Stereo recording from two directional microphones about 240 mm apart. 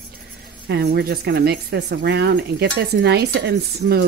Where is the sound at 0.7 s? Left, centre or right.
Right.